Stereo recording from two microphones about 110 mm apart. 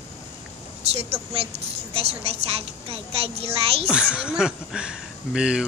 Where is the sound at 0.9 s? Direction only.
65° right (ahead or behind).